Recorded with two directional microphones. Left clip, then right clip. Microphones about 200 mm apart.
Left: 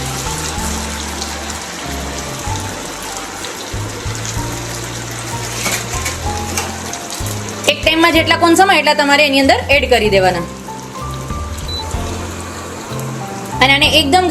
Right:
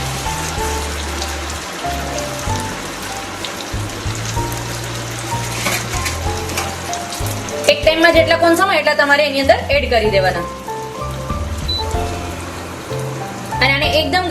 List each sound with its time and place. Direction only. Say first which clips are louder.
7.7 s a woman's voice: even; 50° left (ahead or behind)
13.6 s music: left 4 dB; 45° left (ahead or behind)